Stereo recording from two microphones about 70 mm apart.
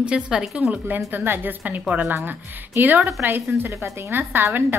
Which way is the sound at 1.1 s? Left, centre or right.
Right.